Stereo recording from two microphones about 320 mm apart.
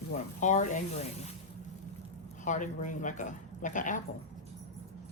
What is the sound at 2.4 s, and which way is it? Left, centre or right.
Speech, left.